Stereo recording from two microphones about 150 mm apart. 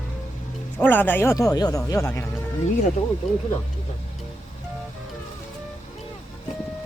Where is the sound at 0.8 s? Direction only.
10° left (ahead or behind).